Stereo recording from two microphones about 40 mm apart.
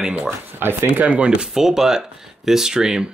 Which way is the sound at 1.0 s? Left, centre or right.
Right.